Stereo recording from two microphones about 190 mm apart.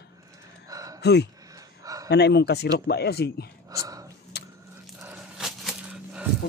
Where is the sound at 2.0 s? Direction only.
60° left (ahead or behind).